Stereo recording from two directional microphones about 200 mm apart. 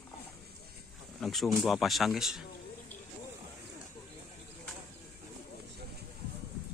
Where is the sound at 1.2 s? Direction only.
Centre (ahead or behind).